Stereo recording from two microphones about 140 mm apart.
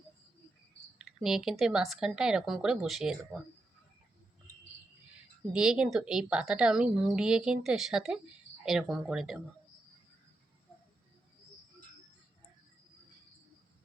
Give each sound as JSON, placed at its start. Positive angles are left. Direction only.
{"t": 0.9, "sound": "speech", "side_deg": -5}
{"t": 5.5, "sound": "speech", "side_deg": -5}